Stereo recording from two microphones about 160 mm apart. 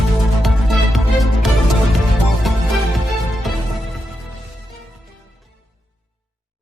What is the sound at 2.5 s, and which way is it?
Music, centre (ahead or behind).